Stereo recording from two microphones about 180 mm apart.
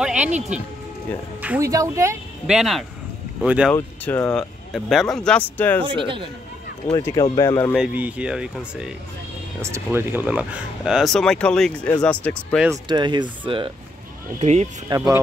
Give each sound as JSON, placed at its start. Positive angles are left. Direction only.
{"t": 0.0, "sound": "speech", "side_deg": -5}
{"t": 2.4, "sound": "speech", "side_deg": 0}
{"t": 3.7, "sound": "speech", "side_deg": 10}
{"t": 5.9, "sound": "speech", "side_deg": -30}
{"t": 6.9, "sound": "speech", "side_deg": 20}
{"t": 7.7, "sound": "speech", "side_deg": -5}
{"t": 12.8, "sound": "speech", "side_deg": -25}
{"t": 14.4, "sound": "speech", "side_deg": -40}
{"t": 14.9, "sound": "speech", "side_deg": -20}